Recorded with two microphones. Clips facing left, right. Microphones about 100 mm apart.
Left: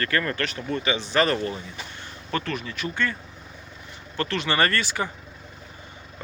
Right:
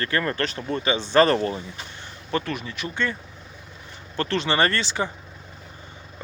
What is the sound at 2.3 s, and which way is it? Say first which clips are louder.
Speech: right 2 dB; 20° right (ahead or behind).